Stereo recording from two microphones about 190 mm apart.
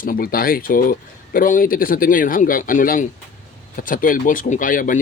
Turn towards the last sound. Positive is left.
turn(degrees=45)  # may be behind; listen again after turning